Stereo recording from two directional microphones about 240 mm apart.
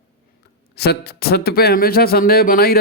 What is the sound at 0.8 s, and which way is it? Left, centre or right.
Speech, left.